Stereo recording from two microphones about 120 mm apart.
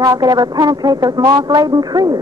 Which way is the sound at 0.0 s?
30° right (ahead or behind).